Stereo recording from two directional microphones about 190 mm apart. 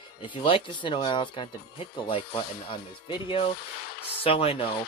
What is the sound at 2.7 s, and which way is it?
A man's voice, 25° left (ahead or behind).